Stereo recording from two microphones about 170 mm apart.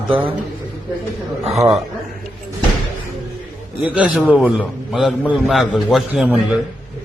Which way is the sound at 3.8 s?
5° right (ahead or behind).